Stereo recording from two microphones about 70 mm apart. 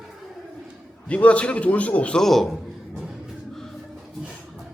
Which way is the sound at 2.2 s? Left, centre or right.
Centre.